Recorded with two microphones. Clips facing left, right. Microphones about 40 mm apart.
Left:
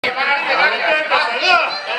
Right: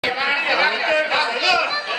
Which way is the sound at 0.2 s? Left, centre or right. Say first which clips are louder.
Left 4 dB; centre.